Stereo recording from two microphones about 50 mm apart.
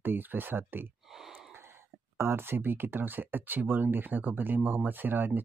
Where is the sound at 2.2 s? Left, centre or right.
Right.